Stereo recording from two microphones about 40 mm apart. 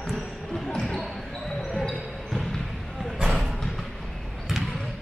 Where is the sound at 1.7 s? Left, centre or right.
Centre.